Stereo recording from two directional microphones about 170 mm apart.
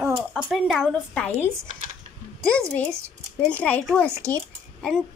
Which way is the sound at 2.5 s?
5° left (ahead or behind).